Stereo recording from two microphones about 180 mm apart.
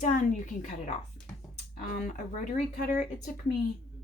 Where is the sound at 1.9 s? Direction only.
45° left (ahead or behind).